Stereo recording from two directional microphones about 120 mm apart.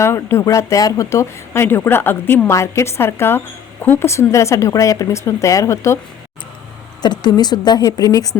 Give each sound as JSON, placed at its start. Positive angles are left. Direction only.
{"t": 0.0, "sound": "speech", "side_deg": 20}
{"t": 7.0, "sound": "a woman's voice", "side_deg": 35}